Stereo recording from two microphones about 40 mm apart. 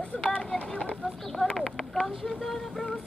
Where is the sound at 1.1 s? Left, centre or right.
Centre.